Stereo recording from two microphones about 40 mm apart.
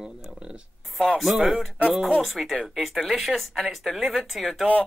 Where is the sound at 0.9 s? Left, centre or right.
Centre.